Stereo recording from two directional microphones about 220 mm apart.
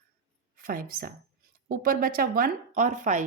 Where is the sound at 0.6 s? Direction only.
40° right (ahead or behind).